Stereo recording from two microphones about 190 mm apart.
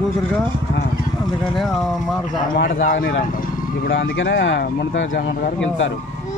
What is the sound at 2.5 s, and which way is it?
Speech, 50° left (ahead or behind).